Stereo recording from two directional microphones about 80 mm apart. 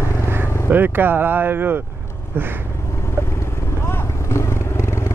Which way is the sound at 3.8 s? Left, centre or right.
Left.